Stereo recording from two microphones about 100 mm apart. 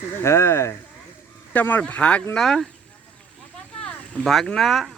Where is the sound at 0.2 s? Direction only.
25° left (ahead or behind); by 2.6 s 5° left (ahead or behind).